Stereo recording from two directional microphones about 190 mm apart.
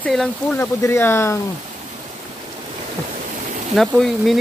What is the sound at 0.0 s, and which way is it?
Speech, 5° left (ahead or behind).